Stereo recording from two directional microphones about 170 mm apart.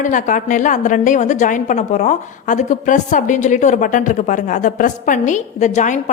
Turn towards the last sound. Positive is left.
turn(degrees=45)  # may be behind; listen again after turning